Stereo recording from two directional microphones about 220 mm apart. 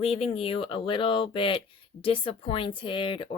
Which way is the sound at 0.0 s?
25° left (ahead or behind).